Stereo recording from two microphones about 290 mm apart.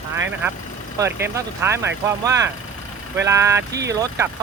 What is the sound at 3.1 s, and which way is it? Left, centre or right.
Speech, centre.